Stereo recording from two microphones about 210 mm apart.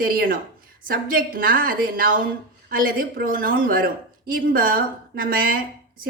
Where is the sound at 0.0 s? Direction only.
45° right (ahead or behind).